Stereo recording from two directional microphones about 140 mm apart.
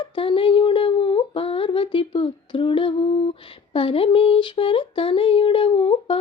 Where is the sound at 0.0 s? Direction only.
40° left (ahead or behind).